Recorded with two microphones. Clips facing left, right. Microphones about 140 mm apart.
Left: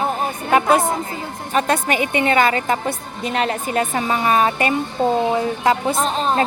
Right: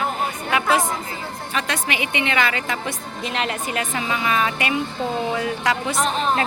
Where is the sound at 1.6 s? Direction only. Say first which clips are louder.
Left 7 dB; 45° left (ahead or behind).